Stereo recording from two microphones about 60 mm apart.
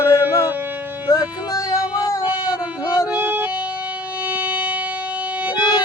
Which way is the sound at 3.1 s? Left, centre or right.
Right.